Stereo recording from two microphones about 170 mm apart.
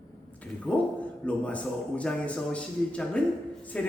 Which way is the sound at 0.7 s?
5° left (ahead or behind).